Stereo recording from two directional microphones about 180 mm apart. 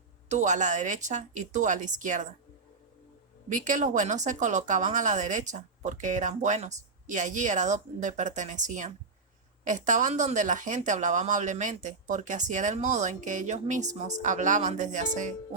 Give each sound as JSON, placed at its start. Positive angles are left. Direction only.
{"t": 0.3, "sound": "a woman's voice", "side_deg": -40}
{"t": 3.5, "sound": "a woman's voice", "side_deg": -45}